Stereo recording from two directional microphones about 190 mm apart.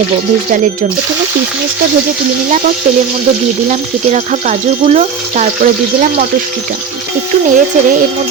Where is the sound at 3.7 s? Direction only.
40° right (ahead or behind).